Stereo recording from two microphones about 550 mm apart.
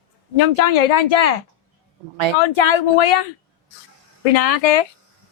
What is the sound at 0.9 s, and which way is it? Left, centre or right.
Speech, left.